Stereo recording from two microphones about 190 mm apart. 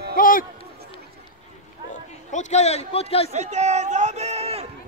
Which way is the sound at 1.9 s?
40° left (ahead or behind).